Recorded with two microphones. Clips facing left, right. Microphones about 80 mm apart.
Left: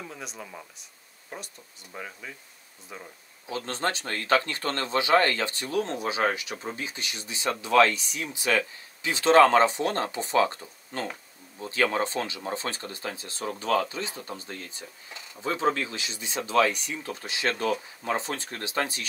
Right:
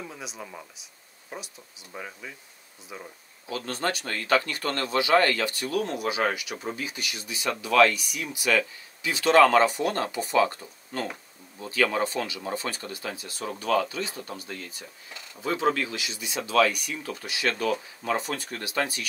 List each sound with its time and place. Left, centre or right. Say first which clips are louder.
0.0 s speech: right 1 dB; centre
3.4 s speech: even; left